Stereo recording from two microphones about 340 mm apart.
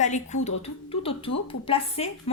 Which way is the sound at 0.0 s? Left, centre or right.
Left.